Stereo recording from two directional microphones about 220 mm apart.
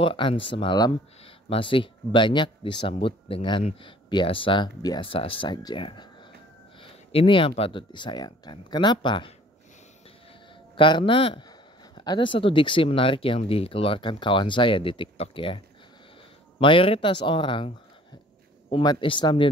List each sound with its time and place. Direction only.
0.0 s speech: 25° left (ahead or behind)
10.8 s speech: 20° left (ahead or behind)